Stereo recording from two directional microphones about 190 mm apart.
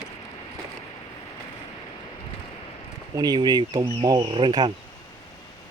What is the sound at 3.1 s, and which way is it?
Speech, 20° right (ahead or behind).